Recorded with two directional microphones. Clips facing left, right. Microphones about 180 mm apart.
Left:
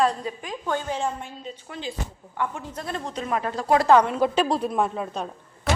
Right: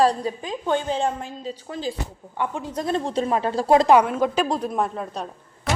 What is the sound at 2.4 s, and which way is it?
A woman's voice, 20° right (ahead or behind).